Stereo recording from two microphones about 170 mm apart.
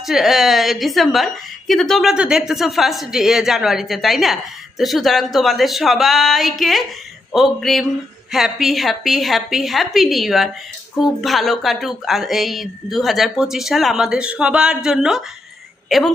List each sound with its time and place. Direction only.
0.0 s a woman's voice: centre (ahead or behind)